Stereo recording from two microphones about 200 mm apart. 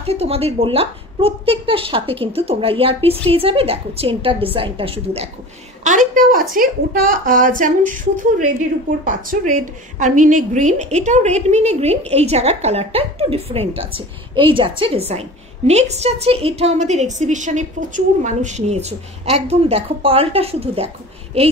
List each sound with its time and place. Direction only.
0.0 s a woman's voice: 30° right (ahead or behind)
5.9 s a woman's voice: 40° right (ahead or behind)